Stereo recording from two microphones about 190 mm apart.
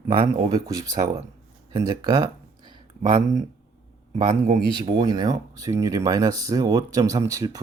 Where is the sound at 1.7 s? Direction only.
20° right (ahead or behind).